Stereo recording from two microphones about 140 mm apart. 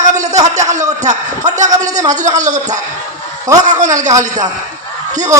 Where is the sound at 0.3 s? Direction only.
25° right (ahead or behind).